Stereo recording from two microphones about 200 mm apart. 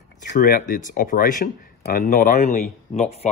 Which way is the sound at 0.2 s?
40° left (ahead or behind).